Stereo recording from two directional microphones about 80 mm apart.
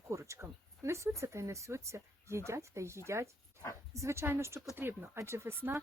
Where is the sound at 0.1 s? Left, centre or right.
Right.